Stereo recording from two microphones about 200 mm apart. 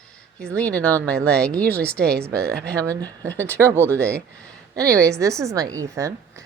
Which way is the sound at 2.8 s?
15° right (ahead or behind).